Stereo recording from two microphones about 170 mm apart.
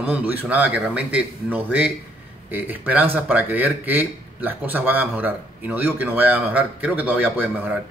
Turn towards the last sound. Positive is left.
turn(degrees=-10)  # may be behind; listen again after turning